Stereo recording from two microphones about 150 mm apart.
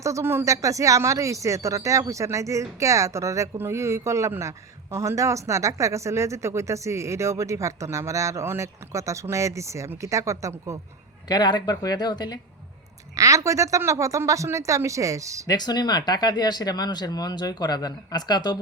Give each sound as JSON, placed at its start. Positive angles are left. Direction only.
{"t": 0.0, "sound": "speech", "side_deg": -20}
{"t": 11.3, "sound": "speech", "side_deg": 30}
{"t": 13.1, "sound": "speech", "side_deg": -20}
{"t": 15.4, "sound": "speech", "side_deg": 25}